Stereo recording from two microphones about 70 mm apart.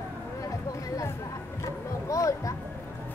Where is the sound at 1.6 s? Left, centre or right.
Left.